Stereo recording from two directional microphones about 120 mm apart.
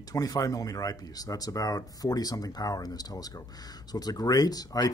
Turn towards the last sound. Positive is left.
turn(degrees=30)  # may be behind; listen again after turning